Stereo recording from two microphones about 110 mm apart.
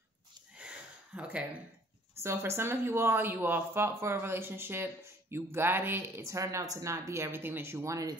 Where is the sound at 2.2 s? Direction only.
25° right (ahead or behind).